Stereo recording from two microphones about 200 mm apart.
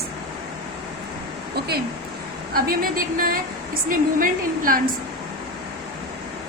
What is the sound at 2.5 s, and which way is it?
A woman's voice, 45° right (ahead or behind).